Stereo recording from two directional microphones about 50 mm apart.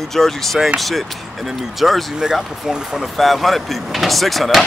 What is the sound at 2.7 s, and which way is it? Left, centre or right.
Speech, centre.